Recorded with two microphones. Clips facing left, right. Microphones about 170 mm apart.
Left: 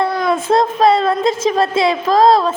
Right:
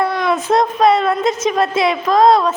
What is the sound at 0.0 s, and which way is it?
A woman's voice, 35° left (ahead or behind).